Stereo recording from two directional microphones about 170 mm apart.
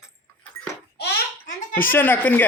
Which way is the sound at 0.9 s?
80° left.